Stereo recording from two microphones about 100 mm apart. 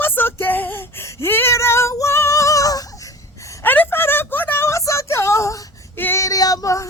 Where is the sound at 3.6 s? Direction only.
20° left (ahead or behind).